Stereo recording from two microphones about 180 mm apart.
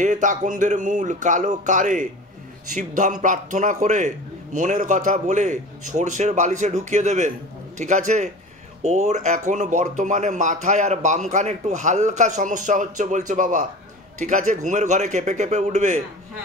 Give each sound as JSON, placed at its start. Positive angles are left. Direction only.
{"t": 0.0, "sound": "a man's voice", "side_deg": -45}